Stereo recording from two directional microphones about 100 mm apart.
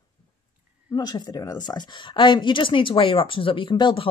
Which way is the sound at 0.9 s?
45° left (ahead or behind).